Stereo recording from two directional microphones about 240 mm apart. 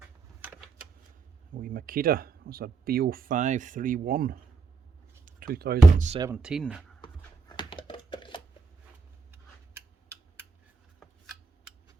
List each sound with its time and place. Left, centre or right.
1.5 s speech: right
5.5 s speech: right
6.1 s speech: centre
6.3 s speech: centre
7.0 s a sound: centre